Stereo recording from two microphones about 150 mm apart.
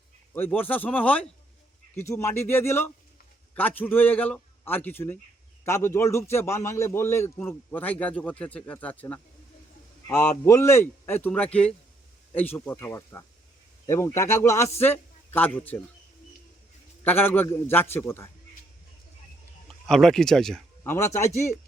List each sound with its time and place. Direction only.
0.3 s a man's voice: 10° left (ahead or behind)
17.0 s a man's voice: 15° left (ahead or behind)
19.6 s speech: centre (ahead or behind)
20.8 s a man's voice: 15° left (ahead or behind)